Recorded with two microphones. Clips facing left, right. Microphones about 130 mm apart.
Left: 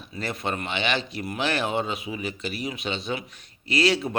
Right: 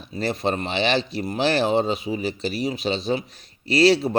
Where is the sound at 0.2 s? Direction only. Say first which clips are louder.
Right 6 dB; 35° right (ahead or behind).